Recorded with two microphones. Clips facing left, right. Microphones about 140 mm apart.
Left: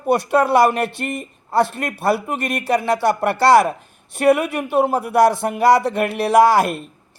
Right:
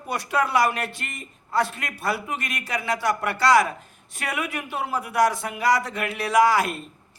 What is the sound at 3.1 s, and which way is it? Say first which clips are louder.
Speech: left 8 dB; 30° left (ahead or behind).